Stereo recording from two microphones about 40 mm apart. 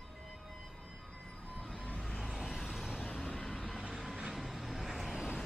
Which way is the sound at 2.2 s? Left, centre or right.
Centre.